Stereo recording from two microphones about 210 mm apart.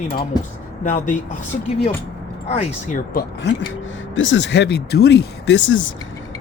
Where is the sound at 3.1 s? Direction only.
50° left (ahead or behind).